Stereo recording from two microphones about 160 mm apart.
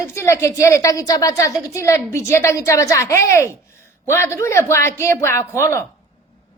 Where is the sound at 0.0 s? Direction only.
15° left (ahead or behind).